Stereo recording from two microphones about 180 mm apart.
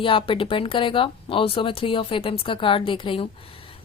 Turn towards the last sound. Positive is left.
turn(degrees=30)  # may be behind; listen again after turning